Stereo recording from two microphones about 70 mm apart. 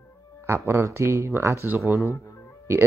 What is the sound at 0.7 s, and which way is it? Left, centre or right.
Speech, right.